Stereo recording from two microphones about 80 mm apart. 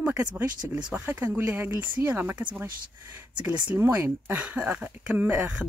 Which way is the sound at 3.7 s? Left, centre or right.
Right.